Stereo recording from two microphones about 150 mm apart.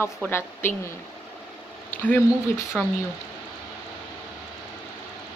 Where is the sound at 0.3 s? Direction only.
15° left (ahead or behind).